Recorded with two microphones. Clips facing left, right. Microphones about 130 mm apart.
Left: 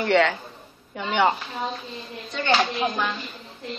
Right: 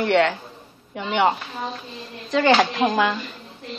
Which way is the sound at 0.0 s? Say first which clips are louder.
Right 1 dB; 5° right (ahead or behind).